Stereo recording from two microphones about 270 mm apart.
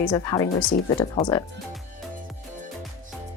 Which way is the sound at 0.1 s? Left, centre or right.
Centre.